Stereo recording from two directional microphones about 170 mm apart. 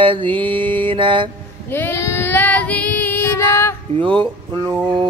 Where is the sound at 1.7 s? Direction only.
15° left (ahead or behind).